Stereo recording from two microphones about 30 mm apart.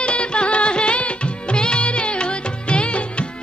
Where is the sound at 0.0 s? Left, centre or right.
Left.